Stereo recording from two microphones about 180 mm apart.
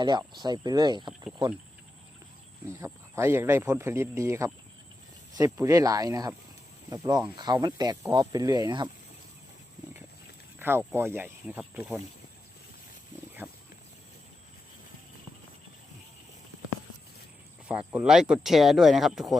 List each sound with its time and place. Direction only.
0.0 s speech: 25° right (ahead or behind)
2.6 s speech: 15° right (ahead or behind)
10.6 s speech: 15° right (ahead or behind)
13.4 s speech: 10° right (ahead or behind)
17.7 s speech: 5° right (ahead or behind)